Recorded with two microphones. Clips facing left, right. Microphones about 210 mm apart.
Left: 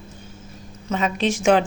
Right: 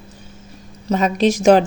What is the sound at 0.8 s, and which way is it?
Speech, 40° right (ahead or behind).